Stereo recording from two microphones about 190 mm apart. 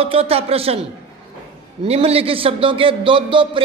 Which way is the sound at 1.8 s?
30° right (ahead or behind).